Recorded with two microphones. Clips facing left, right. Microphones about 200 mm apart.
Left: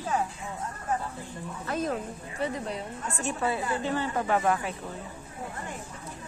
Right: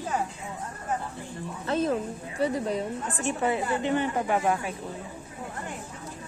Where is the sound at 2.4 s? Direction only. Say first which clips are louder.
Right 5 dB; 35° right (ahead or behind).